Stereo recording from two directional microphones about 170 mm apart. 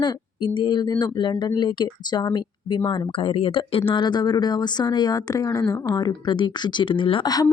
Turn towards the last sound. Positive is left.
turn(degrees=20)  # may be behind; listen again after turning